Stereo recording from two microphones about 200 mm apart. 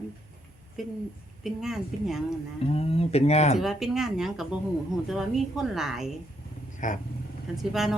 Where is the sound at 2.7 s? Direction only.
30° left (ahead or behind).